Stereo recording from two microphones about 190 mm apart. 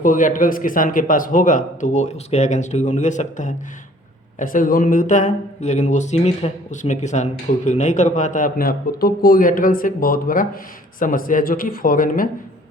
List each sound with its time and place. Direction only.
0.0 s a man's voice: 45° left (ahead or behind)